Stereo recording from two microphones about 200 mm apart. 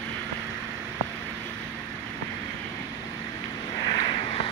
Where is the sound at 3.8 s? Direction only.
20° left (ahead or behind).